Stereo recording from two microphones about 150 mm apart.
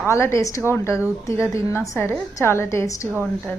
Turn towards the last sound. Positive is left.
turn(degrees=-15)  # may be behind; listen again after turning